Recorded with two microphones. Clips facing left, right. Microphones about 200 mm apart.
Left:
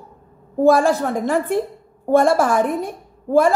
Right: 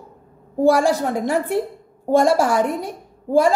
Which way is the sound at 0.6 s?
15° right (ahead or behind).